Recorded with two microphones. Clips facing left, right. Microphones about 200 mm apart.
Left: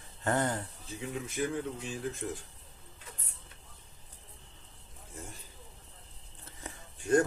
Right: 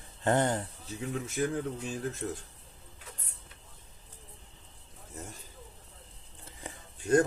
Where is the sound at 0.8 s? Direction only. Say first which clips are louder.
Right 1 dB; 45° right (ahead or behind).